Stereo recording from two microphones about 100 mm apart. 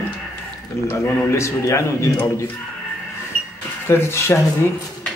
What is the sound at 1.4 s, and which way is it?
Speech, 30° left (ahead or behind).